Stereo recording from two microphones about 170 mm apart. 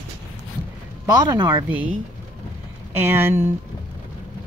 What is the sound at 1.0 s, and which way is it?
Speech, 20° right (ahead or behind).